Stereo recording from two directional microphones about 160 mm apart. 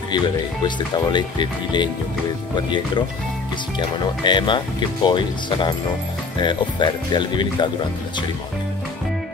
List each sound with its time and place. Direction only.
0.7 s speech: 30° left (ahead or behind)
3.9 s speech: 30° left (ahead or behind)